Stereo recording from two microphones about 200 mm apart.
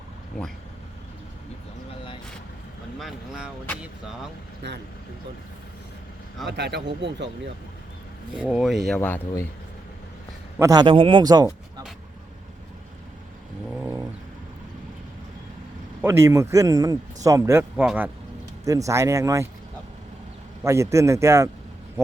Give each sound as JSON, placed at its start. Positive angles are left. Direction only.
{"t": 3.0, "sound": "speech", "side_deg": -5}
{"t": 4.6, "sound": "speech", "side_deg": -60}
{"t": 6.5, "sound": "speech", "side_deg": -55}
{"t": 8.4, "sound": "speech", "side_deg": -5}
{"t": 9.0, "sound": "speech", "side_deg": 10}
{"t": 10.6, "sound": "speech", "side_deg": -20}
{"t": 16.0, "sound": "a man's voice", "side_deg": -10}
{"t": 20.7, "sound": "a man's voice", "side_deg": -15}